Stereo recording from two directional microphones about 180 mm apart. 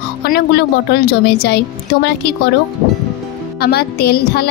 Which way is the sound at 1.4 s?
70° left (ahead or behind).